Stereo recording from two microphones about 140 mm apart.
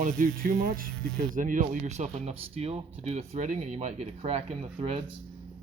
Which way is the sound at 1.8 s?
50° right (ahead or behind).